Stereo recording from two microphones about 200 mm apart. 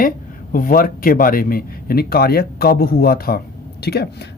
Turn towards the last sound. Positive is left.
turn(degrees=55)  # may be behind; listen again after turning